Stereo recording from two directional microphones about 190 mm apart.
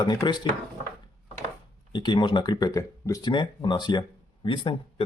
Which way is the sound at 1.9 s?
25° left (ahead or behind).